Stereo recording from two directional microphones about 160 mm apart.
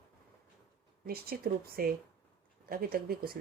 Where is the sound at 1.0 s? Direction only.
70° right (ahead or behind).